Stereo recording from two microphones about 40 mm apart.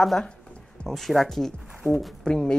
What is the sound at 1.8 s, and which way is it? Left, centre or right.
Speech, left.